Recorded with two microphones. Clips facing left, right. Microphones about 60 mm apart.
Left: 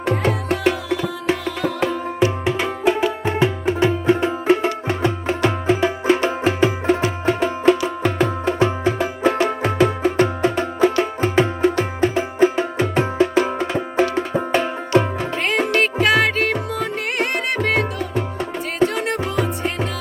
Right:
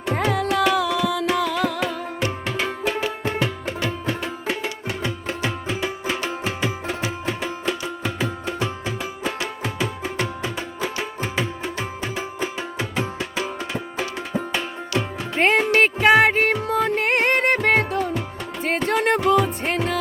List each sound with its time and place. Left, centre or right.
0.1 s music: right
0.8 s music: right
1.8 s music: left
15.4 s music: right
16.6 s music: right